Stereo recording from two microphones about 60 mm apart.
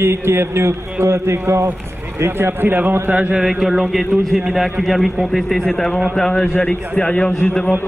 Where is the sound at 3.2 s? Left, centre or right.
Right.